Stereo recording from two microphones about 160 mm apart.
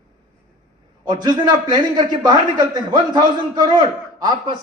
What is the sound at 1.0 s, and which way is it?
A man's voice, 25° right (ahead or behind).